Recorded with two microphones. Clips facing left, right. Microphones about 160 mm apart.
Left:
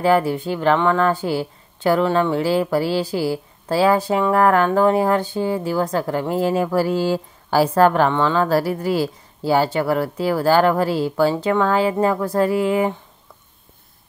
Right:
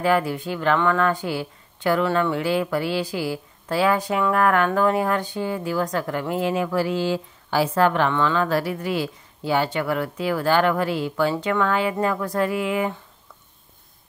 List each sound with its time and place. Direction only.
0.0 s speech: 30° left (ahead or behind)